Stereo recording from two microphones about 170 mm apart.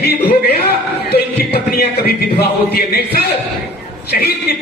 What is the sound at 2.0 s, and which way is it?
A man's voice, 65° left (ahead or behind).